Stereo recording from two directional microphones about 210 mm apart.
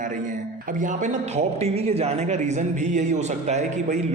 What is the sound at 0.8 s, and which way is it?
A man's voice, 35° right (ahead or behind).